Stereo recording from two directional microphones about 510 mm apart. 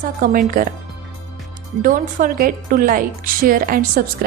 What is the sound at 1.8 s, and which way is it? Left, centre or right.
A woman's voice, centre.